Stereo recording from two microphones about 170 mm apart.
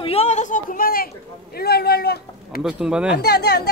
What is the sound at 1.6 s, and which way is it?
Speech, 70° left (ahead or behind).